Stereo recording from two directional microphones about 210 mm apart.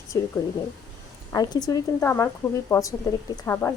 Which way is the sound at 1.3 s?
20° left (ahead or behind).